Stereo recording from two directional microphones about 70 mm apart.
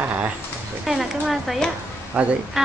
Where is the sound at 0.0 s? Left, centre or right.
Right.